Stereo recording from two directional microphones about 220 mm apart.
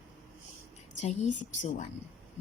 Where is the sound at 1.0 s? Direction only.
35° left (ahead or behind).